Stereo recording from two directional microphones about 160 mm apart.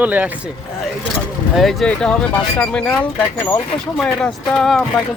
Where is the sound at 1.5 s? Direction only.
5° left (ahead or behind).